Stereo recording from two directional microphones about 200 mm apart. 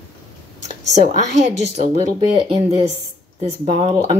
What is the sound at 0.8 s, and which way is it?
A woman's voice, 35° right (ahead or behind).